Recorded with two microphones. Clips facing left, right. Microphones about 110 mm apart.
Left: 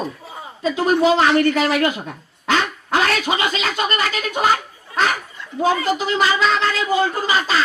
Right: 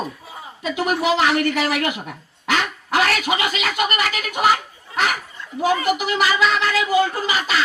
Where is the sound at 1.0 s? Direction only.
30° left (ahead or behind).